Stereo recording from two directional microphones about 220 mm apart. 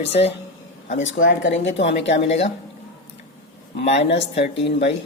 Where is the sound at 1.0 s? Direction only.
60° left (ahead or behind).